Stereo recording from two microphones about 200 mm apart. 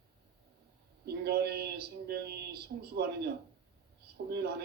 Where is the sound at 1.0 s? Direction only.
55° right (ahead or behind).